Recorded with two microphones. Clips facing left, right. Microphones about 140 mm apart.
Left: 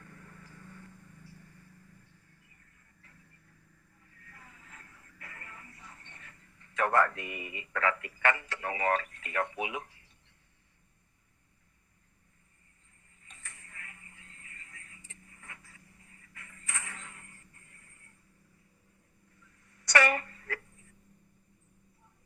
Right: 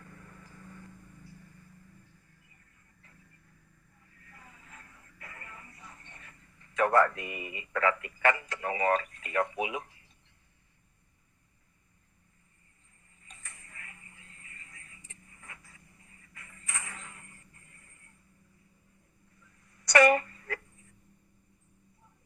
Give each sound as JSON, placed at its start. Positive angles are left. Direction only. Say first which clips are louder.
{"t": 0.0, "sound": "vehicle", "louder": "right 1 dB", "side_deg": -30}
{"t": 4.2, "sound": "music", "louder": "right 1 dB", "side_deg": -25}
{"t": 7.2, "sound": "speech", "louder": "right 1 dB", "side_deg": -30}
{"t": 13.2, "sound": "television", "louder": "even", "side_deg": -35}
{"t": 15.3, "sound": "a sound", "louder": "even", "side_deg": -30}
{"t": 17.5, "sound": "music", "louder": "right 1 dB", "side_deg": -25}
{"t": 19.6, "sound": "a sound", "louder": "right 5 dB", "side_deg": -35}